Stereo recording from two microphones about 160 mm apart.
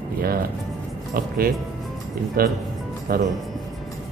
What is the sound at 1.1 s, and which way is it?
Speech, 65° right (ahead or behind).